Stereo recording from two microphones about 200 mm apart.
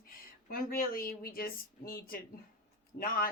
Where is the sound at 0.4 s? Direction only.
45° left (ahead or behind).